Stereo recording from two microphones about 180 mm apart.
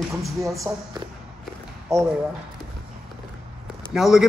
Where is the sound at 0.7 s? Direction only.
15° right (ahead or behind).